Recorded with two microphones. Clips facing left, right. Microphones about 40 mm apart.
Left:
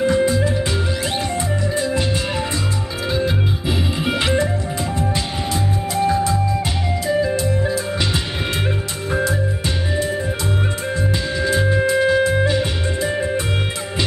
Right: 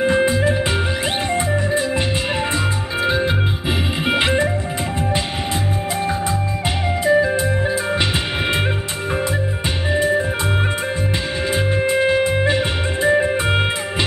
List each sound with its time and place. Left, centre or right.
0.0 s music: right
1.7 s music: right
3.1 s music: right
5.9 s music: right
7.1 s organ: right
11.4 s music: right